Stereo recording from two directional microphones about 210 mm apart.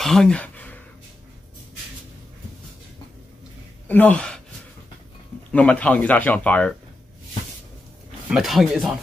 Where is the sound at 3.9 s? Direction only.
10° left (ahead or behind).